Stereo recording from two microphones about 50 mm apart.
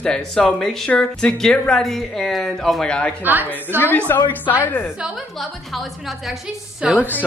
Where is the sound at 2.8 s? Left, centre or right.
Centre.